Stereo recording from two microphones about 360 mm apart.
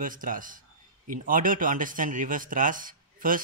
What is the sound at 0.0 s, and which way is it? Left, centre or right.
Speech, right.